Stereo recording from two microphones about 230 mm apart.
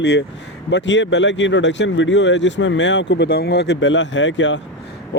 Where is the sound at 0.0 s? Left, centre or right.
Left.